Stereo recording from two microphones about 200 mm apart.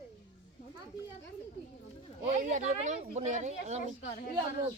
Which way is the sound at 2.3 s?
40° right (ahead or behind).